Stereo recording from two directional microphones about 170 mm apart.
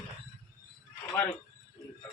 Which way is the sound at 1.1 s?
10° left (ahead or behind).